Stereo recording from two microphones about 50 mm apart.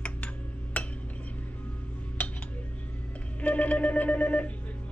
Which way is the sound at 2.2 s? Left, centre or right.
Left.